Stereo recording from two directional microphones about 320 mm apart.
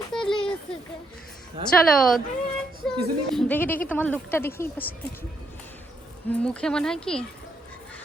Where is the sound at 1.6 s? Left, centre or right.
Centre.